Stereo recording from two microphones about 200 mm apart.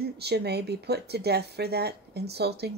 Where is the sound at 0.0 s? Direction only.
55° right (ahead or behind).